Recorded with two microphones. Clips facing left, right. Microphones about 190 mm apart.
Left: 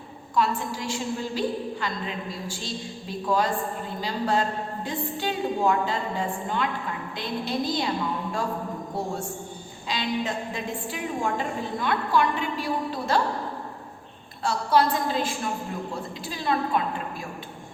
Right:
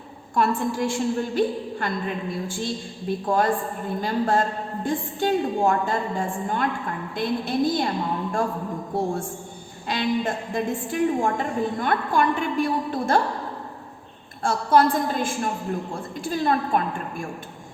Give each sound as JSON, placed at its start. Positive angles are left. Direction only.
{"t": 0.3, "sound": "a man's voice", "side_deg": -55}
{"t": 9.9, "sound": "a man's voice", "side_deg": -50}
{"t": 14.4, "sound": "a man's voice", "side_deg": -50}